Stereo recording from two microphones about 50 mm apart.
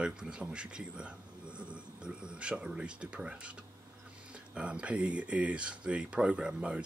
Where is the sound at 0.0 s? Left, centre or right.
Centre.